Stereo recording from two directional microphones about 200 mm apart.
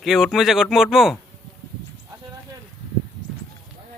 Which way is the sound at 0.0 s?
Centre (ahead or behind).